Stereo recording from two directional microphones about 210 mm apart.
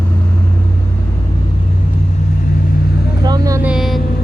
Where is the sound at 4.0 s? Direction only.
45° left (ahead or behind).